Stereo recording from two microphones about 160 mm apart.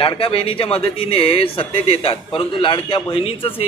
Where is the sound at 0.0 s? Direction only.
35° left (ahead or behind).